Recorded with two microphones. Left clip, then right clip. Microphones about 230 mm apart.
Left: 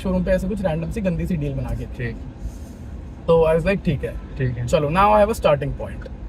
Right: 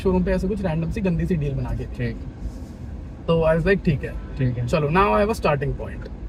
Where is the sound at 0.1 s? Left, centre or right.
Left.